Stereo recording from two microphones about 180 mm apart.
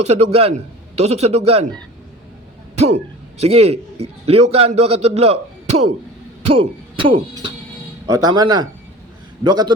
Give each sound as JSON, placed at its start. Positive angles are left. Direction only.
{"t": 0.0, "sound": "a man's voice", "side_deg": -35}
{"t": 3.4, "sound": "a man's voice", "side_deg": -35}